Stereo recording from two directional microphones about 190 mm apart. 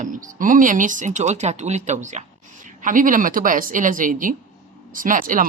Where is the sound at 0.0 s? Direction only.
45° right (ahead or behind).